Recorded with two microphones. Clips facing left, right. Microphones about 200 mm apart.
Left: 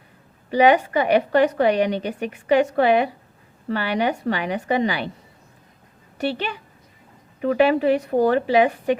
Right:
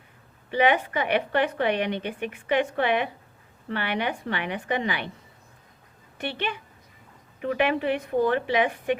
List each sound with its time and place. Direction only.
0.5 s a woman's voice: 40° left (ahead or behind)
6.1 s a woman's voice: 40° left (ahead or behind)
7.5 s a woman's voice: 35° left (ahead or behind)